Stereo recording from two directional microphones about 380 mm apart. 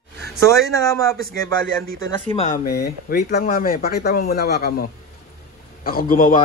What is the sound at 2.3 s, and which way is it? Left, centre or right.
Speech, centre.